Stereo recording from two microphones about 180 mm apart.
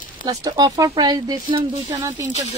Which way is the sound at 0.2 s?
20° right (ahead or behind).